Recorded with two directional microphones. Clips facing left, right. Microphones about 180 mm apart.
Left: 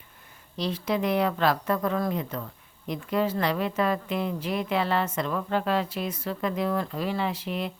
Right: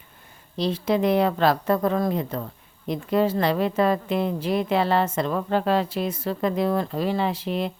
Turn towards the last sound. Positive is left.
turn(degrees=-30)  # may be behind; listen again after turning